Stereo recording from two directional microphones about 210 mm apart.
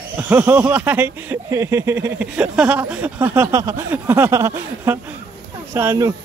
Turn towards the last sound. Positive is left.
turn(degrees=-15)  # may be behind; listen again after turning